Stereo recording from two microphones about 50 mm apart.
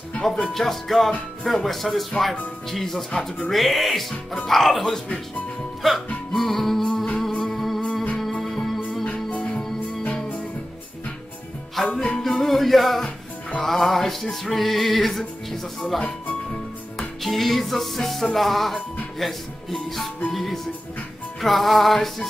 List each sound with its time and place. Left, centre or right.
0.2 s music: centre
3.1 s speech: centre
3.5 s music: centre
4.5 s speech: centre
5.8 s music: centre
9.0 s music: left
11.7 s music: centre
17.2 s music: centre
19.1 s speech: centre
20.2 s music: centre